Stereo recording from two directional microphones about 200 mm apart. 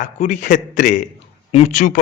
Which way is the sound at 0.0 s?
40° left (ahead or behind).